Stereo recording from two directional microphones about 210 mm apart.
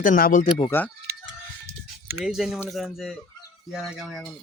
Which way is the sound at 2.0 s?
5° right (ahead or behind).